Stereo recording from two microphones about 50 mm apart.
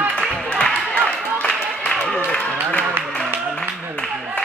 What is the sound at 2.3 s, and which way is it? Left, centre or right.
Music, left.